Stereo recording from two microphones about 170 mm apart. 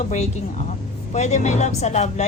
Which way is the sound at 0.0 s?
45° left (ahead or behind).